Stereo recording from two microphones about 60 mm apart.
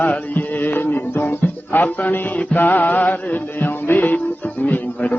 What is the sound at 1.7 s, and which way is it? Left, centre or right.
Mantra, left.